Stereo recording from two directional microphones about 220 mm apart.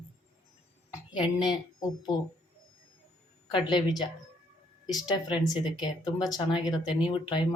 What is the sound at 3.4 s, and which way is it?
Speech, 20° left (ahead or behind).